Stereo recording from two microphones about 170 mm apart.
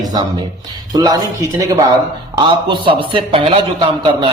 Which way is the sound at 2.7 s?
30° right (ahead or behind).